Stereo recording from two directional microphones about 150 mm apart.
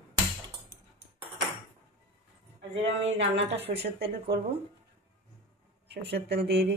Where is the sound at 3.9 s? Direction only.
90° right.